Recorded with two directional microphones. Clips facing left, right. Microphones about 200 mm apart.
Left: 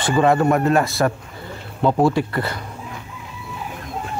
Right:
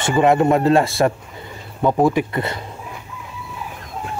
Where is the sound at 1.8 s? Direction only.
15° right (ahead or behind).